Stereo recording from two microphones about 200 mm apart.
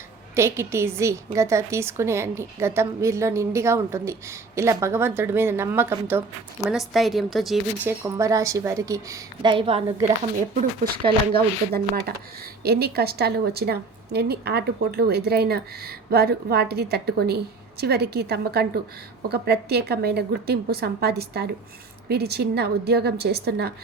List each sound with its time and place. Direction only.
0.3 s a woman's voice: 15° right (ahead or behind)
7.9 s a woman's voice: 15° right (ahead or behind)
10.9 s speech: 25° right (ahead or behind)
11.3 s a woman's voice: 50° right (ahead or behind)